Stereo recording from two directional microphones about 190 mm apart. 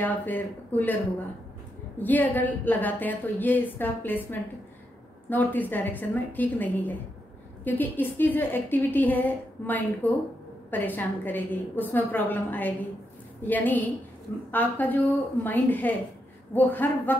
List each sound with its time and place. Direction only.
0.0 s a woman's voice: 10° left (ahead or behind)
2.0 s a woman's voice: 10° left (ahead or behind)